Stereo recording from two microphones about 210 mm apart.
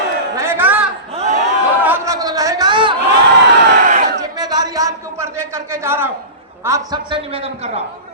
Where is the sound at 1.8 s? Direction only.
10° right (ahead or behind).